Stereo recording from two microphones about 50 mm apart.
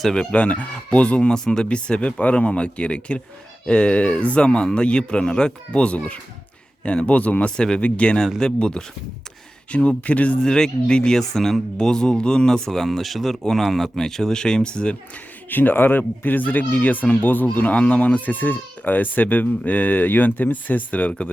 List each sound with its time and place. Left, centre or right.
0.2 s speech: left
7.5 s speech: centre
7.8 s speech: left
10.0 s speech: left
10.4 s speech: centre
15.4 s speech: left